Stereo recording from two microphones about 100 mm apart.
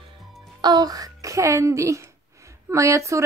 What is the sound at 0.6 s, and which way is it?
A child's voice, 45° right (ahead or behind).